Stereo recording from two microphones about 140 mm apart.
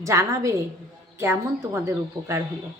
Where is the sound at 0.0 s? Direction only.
20° right (ahead or behind).